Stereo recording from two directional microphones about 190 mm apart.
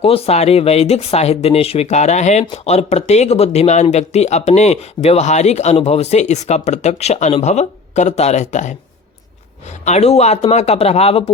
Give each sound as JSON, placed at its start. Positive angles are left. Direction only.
{"t": 0.0, "sound": "speech", "side_deg": 30}
{"t": 9.8, "sound": "speech", "side_deg": 35}